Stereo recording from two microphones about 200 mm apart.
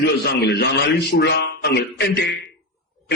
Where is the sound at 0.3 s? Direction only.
55° left (ahead or behind).